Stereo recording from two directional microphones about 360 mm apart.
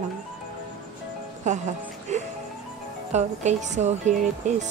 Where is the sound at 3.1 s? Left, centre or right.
Centre.